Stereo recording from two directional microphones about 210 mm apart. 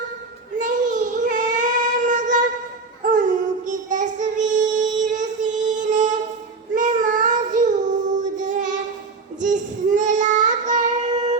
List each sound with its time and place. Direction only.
0.6 s child singing: 35° right (ahead or behind)